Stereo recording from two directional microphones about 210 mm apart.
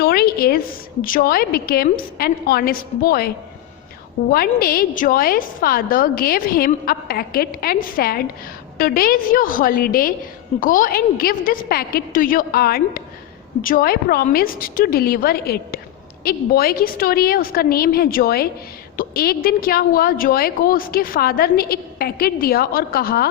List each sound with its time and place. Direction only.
0.0 s a sound: 45° left (ahead or behind)
1.0 s a woman's voice: 45° left (ahead or behind)
4.3 s a woman's voice: 45° left (ahead or behind)